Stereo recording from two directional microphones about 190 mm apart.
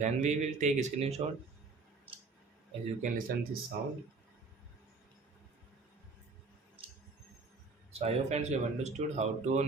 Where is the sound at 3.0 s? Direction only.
45° right (ahead or behind).